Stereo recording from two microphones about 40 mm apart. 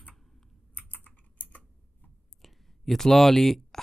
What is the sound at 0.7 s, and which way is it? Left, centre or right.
Typing, left.